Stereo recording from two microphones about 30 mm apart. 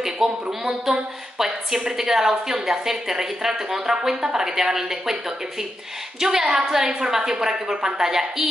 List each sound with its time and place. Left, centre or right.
0.0 s a woman's voice: centre
6.1 s a woman's voice: centre